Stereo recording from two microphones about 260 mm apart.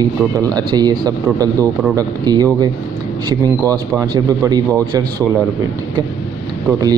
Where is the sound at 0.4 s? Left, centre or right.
Centre.